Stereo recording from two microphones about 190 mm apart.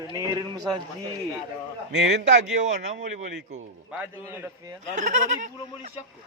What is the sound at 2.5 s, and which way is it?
Speech, 40° right (ahead or behind).